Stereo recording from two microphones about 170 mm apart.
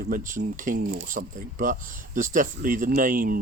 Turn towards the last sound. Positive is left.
turn(degrees=-55)  # may be behind; listen again after turning